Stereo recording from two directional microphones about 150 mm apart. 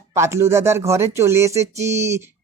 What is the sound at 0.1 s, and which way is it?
Speech, 20° right (ahead or behind).